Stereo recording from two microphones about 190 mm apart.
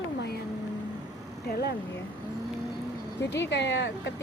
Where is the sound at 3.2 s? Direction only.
65° left (ahead or behind).